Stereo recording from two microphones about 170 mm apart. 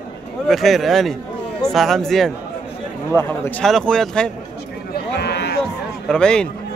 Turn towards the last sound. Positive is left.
turn(degrees=5)  # may be behind; listen again after turning